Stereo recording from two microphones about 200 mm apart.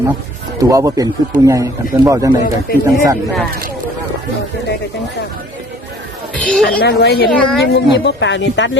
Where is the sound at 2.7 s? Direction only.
50° left (ahead or behind).